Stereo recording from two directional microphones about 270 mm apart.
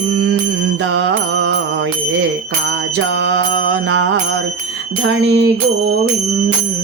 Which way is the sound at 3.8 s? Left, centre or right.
Right.